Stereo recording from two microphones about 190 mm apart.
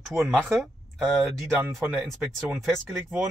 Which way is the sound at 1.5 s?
10° right (ahead or behind).